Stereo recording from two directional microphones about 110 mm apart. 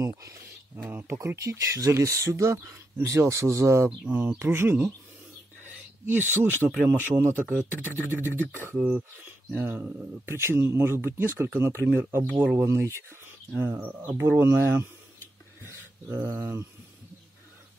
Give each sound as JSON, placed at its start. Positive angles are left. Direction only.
{"t": 0.0, "sound": "speech", "side_deg": -25}
{"t": 4.0, "sound": "speech", "side_deg": -15}
{"t": 6.0, "sound": "speech", "side_deg": -20}